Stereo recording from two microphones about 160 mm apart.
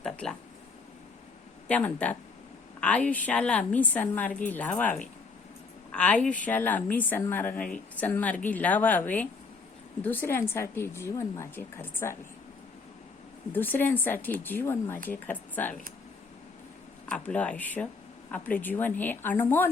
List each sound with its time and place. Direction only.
0.0 s a sound: 5° left (ahead or behind)
1.6 s speech: 10° left (ahead or behind)
13.5 s speech: 10° left (ahead or behind)
17.1 s speech: 10° left (ahead or behind)